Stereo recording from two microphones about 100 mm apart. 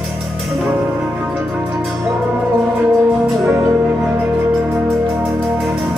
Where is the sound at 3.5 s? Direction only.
35° right (ahead or behind).